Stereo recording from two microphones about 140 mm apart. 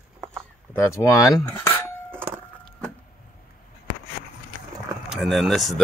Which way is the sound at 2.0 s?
15° right (ahead or behind).